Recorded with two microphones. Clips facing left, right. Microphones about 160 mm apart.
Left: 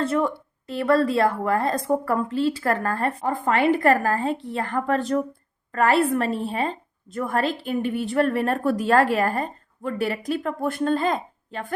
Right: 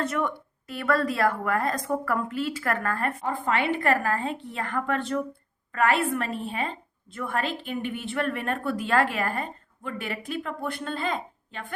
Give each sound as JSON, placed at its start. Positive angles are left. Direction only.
{"t": 0.0, "sound": "a woman's voice", "side_deg": 30}
{"t": 3.3, "sound": "a woman's voice", "side_deg": 45}